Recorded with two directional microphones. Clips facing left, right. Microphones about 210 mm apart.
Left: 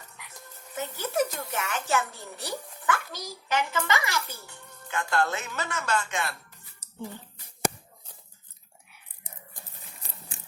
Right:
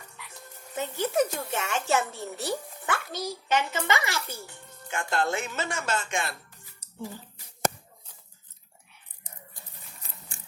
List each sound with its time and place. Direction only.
1.0 s speech: 25° right (ahead or behind)